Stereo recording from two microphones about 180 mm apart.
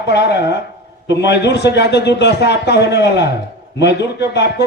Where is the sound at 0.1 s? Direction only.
70° left (ahead or behind).